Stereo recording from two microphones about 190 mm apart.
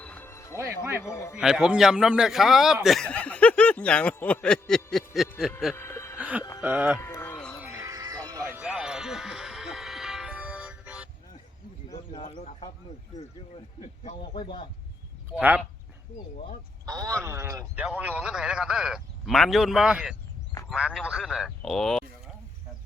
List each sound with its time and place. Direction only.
0.0 s music: 10° left (ahead or behind)
0.6 s speech: 15° right (ahead or behind)
1.0 s a man's voice: 15° left (ahead or behind)
1.4 s speech: 5° right (ahead or behind)
5.7 s music: 15° left (ahead or behind)
6.1 s a sound: 10° right (ahead or behind)
6.6 s speech: 10° right (ahead or behind)
7.0 s music: 15° left (ahead or behind)
7.6 s music: 15° right (ahead or behind)
11.9 s a sound: 30° left (ahead or behind)
13.8 s a man's voice: 35° left (ahead or behind)
15.4 s speech: 10° right (ahead or behind)
16.8 s a man's voice: 20° right (ahead or behind); by 22.0 s centre (ahead or behind)